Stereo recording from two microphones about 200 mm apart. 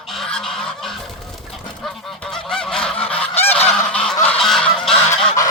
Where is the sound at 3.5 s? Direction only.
5° left (ahead or behind).